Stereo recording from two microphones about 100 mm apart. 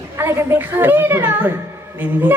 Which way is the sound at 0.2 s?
25° right (ahead or behind).